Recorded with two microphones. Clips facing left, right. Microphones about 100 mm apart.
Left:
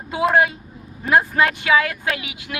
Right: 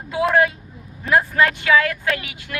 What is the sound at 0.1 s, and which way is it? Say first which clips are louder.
Speech: even; 25° left (ahead or behind).